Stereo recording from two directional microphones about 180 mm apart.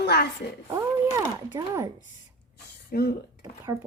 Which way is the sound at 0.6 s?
15° right (ahead or behind).